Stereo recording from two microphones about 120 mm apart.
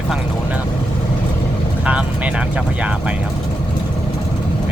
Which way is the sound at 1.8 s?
10° right (ahead or behind).